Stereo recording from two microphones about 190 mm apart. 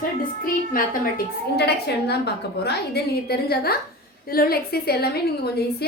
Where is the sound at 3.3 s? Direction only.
55° left (ahead or behind).